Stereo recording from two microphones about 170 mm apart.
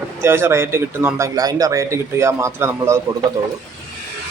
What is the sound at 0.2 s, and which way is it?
A man's voice, 15° right (ahead or behind).